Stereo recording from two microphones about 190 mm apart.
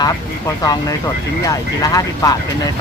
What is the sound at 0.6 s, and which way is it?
Speech, 20° left (ahead or behind).